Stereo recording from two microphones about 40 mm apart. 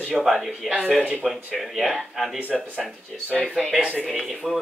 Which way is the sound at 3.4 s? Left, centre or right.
Centre.